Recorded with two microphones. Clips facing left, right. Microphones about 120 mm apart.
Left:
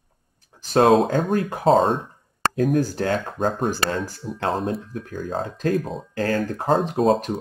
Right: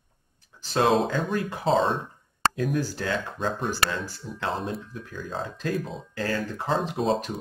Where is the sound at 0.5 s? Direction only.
50° left (ahead or behind).